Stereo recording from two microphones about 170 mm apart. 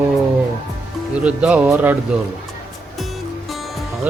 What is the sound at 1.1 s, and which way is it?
Speech, 5° right (ahead or behind).